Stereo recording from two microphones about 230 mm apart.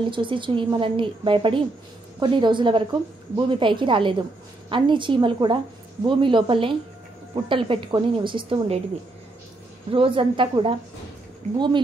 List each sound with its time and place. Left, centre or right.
0.1 s a woman's voice: right
9.8 s a woman's voice: right